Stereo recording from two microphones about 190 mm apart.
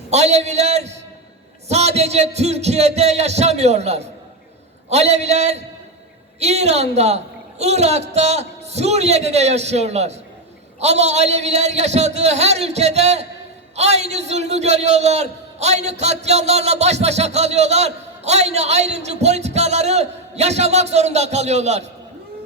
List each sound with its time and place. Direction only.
0.1 s a man's voice: 35° right (ahead or behind)